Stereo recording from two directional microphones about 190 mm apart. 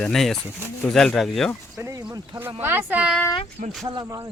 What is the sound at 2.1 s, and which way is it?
Speech, 15° right (ahead or behind).